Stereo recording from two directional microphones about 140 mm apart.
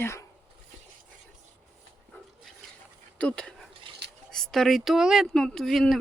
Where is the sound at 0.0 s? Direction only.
20° left (ahead or behind).